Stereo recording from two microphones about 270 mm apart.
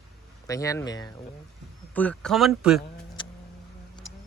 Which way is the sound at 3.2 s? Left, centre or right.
Centre.